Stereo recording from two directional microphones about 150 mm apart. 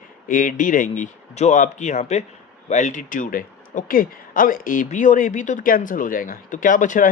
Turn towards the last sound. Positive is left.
turn(degrees=60)  # may be behind; listen again after turning